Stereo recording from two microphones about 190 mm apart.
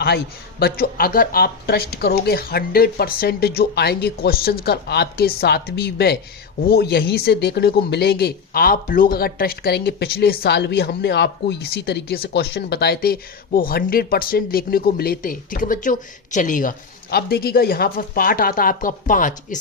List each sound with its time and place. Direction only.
0.6 s speech: 50° left (ahead or behind)